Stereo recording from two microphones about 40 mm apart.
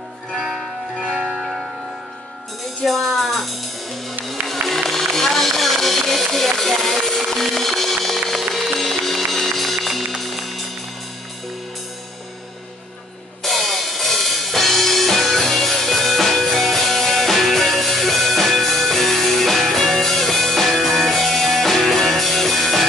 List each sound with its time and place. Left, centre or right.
0.3 s music: centre
2.8 s music: centre
13.4 s music: centre